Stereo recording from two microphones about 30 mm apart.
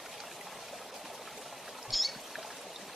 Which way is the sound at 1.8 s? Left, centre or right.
Centre.